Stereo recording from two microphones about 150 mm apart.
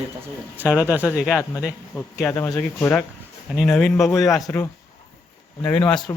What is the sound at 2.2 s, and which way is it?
Speech, 15° left (ahead or behind).